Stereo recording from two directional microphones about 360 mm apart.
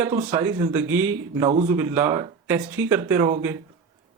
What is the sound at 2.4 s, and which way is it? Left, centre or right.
Speech, centre.